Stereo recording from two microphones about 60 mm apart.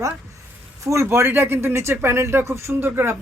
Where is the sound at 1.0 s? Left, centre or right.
Right.